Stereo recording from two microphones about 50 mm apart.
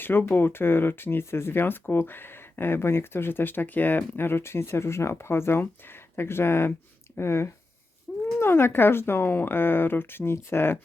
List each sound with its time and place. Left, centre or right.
0.0 s speech: left